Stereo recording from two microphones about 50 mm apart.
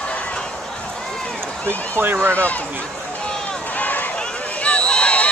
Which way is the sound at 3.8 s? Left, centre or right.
Left.